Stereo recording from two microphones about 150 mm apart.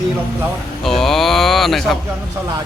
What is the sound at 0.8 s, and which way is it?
Speech, centre (ahead or behind).